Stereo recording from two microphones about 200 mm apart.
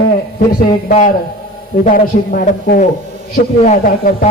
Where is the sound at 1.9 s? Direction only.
45° left (ahead or behind).